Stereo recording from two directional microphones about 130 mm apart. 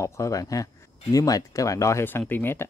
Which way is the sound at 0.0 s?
25° left (ahead or behind).